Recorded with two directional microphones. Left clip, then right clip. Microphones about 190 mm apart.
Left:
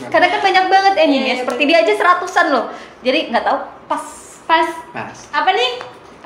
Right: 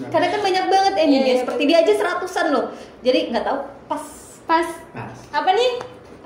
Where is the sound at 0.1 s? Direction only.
10° right (ahead or behind).